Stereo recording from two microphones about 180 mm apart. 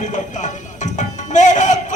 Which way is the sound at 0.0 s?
45° left (ahead or behind).